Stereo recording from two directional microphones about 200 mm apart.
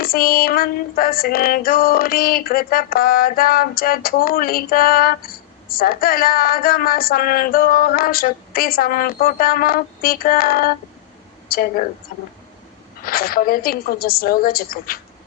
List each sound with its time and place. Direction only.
0.0 s female singing: 45° left (ahead or behind)
11.4 s a woman's voice: 50° left (ahead or behind)
13.1 s female singing: 45° left (ahead or behind)